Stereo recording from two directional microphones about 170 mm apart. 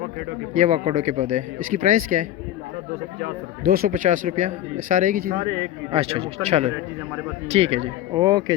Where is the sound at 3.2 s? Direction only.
60° right (ahead or behind).